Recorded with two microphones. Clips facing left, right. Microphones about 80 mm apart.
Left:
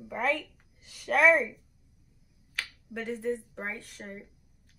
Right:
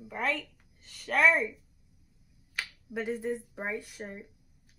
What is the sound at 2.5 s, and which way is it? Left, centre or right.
Speech, centre.